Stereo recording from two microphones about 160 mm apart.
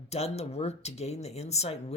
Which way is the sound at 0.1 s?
40° left (ahead or behind).